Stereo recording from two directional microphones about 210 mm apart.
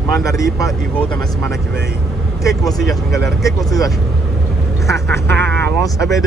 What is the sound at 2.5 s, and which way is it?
Speech, centre (ahead or behind).